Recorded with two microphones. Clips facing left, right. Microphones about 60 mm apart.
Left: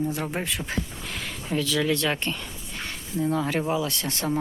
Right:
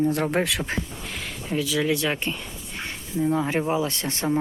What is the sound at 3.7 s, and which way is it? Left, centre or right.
Speech, right.